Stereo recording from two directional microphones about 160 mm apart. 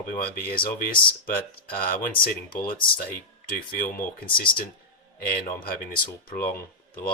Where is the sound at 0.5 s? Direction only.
65° left (ahead or behind).